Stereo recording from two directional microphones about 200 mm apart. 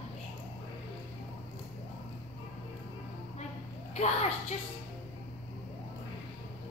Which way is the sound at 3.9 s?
35° left (ahead or behind).